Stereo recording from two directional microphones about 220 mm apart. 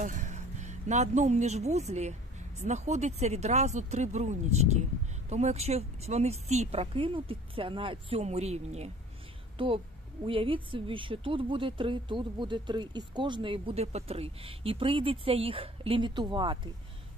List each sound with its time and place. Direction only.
0.0 s speech: 35° right (ahead or behind)
10.2 s speech: 25° right (ahead or behind)